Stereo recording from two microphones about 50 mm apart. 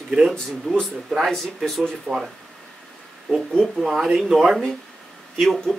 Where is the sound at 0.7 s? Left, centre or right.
Left.